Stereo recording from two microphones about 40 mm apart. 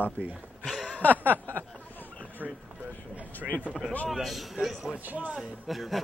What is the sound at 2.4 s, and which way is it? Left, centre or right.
Speech, right.